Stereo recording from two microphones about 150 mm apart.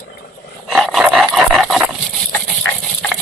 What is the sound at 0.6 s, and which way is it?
Dog, centre (ahead or behind).